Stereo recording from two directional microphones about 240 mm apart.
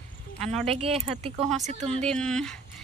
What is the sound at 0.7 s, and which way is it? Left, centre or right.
Speech, right.